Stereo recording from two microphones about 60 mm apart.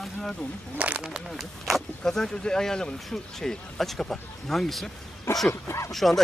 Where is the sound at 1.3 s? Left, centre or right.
Centre.